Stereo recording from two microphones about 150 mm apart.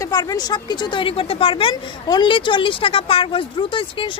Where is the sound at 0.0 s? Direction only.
25° left (ahead or behind).